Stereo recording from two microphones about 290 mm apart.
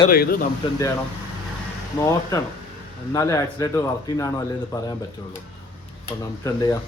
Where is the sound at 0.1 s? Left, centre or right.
Left.